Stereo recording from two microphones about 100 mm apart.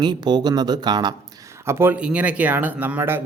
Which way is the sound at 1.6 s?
25° right (ahead or behind).